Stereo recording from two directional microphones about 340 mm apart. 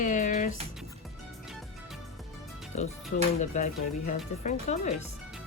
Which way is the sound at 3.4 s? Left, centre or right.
Left.